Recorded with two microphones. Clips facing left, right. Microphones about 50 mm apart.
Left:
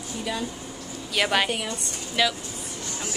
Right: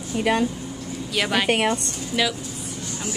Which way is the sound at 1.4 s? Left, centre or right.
Right.